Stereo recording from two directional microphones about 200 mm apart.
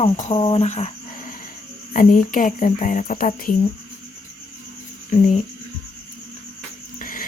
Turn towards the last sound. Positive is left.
turn(degrees=45)  # may be behind; listen again after turning